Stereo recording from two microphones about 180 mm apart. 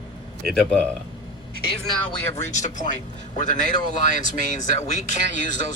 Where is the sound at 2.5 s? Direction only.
40° left (ahead or behind).